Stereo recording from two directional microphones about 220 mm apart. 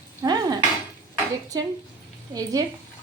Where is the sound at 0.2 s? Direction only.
20° right (ahead or behind).